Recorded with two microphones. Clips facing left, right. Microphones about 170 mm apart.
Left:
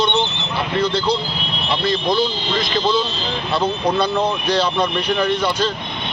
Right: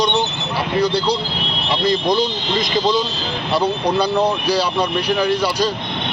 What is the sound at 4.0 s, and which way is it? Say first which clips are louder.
Speech: right 2 dB; 10° right (ahead or behind).